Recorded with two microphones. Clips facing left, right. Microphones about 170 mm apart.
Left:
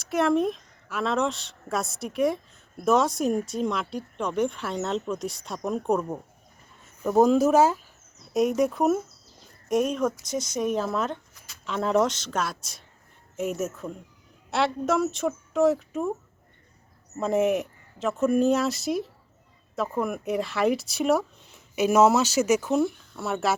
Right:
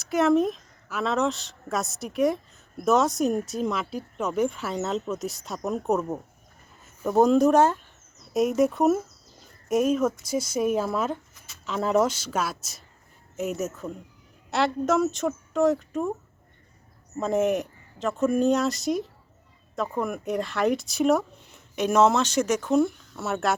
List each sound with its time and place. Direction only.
0.0 s speech: centre (ahead or behind)
17.2 s speech: centre (ahead or behind)